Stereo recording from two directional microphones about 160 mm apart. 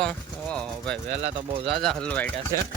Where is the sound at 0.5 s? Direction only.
5° left (ahead or behind).